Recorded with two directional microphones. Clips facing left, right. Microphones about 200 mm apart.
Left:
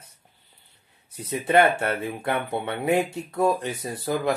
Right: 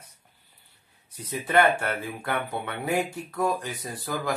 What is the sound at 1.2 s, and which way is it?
Speech, 25° left (ahead or behind).